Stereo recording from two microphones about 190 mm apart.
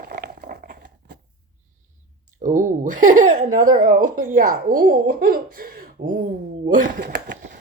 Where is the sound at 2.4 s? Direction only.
45° right (ahead or behind).